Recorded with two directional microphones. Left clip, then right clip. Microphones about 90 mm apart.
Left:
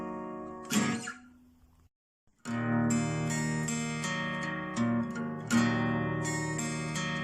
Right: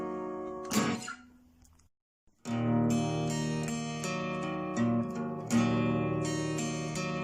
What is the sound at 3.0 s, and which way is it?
Music, centre (ahead or behind).